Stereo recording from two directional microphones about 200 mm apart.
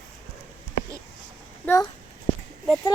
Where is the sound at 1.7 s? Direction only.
15° left (ahead or behind).